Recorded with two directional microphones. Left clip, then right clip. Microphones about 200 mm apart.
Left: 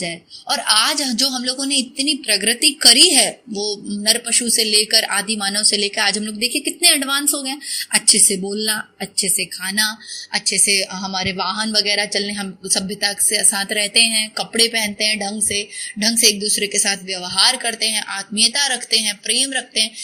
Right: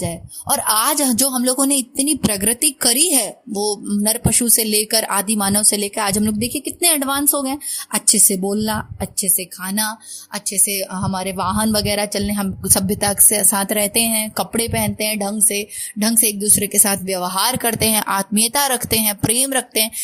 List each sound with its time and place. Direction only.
0.0 s speech: 45° right (ahead or behind)